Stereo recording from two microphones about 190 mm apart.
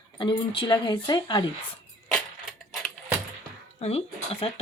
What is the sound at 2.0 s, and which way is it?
Keys jangling, centre (ahead or behind).